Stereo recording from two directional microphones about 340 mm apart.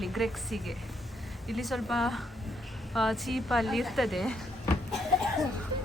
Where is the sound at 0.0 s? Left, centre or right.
Centre.